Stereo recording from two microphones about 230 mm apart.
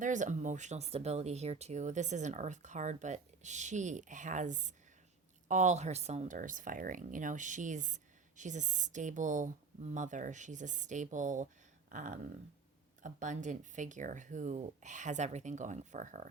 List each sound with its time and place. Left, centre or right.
0.0 s speech: right